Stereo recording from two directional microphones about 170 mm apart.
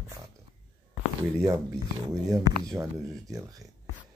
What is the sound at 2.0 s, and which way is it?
Speech, 20° right (ahead or behind).